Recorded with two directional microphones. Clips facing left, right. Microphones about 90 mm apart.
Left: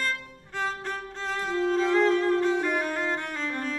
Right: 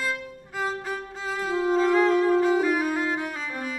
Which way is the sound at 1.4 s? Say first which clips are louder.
Right 3 dB; 5° right (ahead or behind).